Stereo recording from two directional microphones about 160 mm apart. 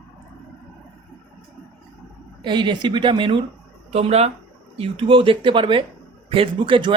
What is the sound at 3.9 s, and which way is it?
A man's voice, 40° right (ahead or behind).